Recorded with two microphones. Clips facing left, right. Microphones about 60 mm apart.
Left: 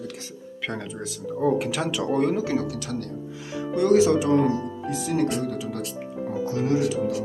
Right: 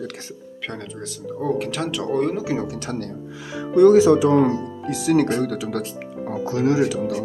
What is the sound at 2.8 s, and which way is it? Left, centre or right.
Speech, right.